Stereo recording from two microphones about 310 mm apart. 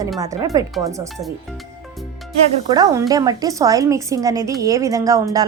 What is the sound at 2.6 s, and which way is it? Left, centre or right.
Speech, centre.